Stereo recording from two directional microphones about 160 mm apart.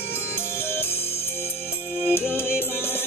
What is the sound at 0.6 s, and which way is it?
Music, 15° left (ahead or behind).